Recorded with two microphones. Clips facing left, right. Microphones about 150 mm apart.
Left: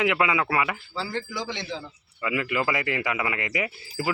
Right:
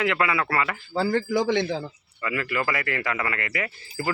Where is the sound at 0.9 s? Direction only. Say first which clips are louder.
Right 11 dB; 50° right (ahead or behind).